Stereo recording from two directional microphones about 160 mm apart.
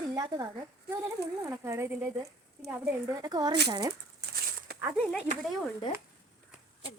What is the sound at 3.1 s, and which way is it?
Speech, 25° right (ahead or behind).